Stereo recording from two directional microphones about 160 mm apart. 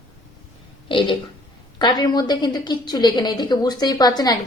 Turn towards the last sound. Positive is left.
turn(degrees=25)  # may be behind; listen again after turning